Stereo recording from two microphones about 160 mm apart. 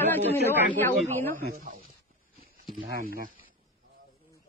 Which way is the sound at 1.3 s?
60° right (ahead or behind).